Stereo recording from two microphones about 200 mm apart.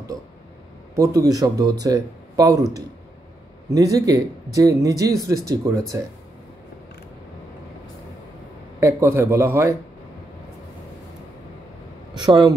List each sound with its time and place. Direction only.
0.9 s speech: 15° right (ahead or behind)
8.7 s speech: 10° right (ahead or behind)
12.1 s speech: 20° right (ahead or behind)